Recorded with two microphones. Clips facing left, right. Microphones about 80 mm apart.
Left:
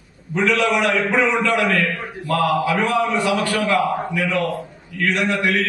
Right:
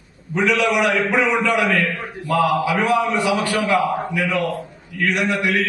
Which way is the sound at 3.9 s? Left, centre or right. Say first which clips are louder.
Even; centre.